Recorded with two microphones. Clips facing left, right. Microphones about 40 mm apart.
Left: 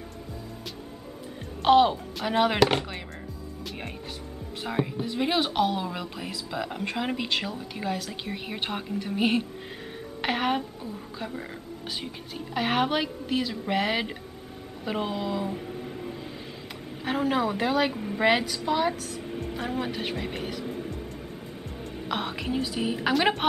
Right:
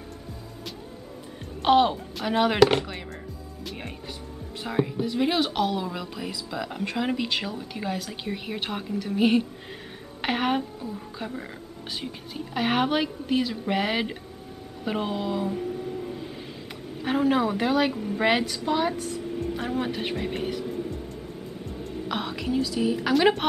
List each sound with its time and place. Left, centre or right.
1.6 s speech: centre
3.6 s music: centre
4.6 s speech: centre
10.2 s speech: centre
14.9 s a sound: centre
17.0 s speech: centre
20.6 s music: centre
21.9 s a woman's voice: centre
23.1 s speech: centre